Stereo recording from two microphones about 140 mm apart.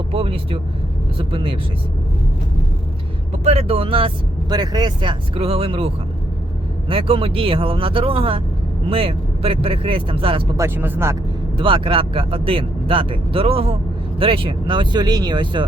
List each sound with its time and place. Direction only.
0.1 s vehicle: 40° right (ahead or behind)
1.3 s speech: 40° right (ahead or behind)
3.4 s speech: 45° right (ahead or behind)
10.6 s speech: 15° right (ahead or behind)
11.5 s speech: 40° right (ahead or behind)